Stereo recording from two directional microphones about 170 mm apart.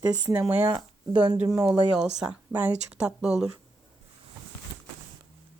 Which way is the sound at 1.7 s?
5° right (ahead or behind).